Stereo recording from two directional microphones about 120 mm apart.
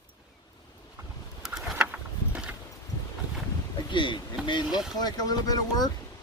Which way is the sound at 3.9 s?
40° left (ahead or behind).